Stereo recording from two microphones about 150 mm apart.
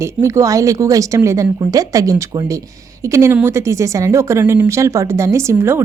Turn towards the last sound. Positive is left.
turn(degrees=-15)  # may be behind; listen again after turning